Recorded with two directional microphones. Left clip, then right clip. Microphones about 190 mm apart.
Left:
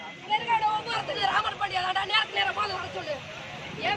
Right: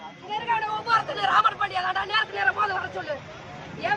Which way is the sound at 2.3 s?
10° right (ahead or behind).